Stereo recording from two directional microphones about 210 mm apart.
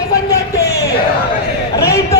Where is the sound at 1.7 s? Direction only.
15° left (ahead or behind).